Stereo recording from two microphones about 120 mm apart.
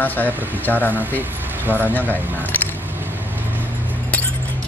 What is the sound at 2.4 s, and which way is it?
Squish, 15° left (ahead or behind).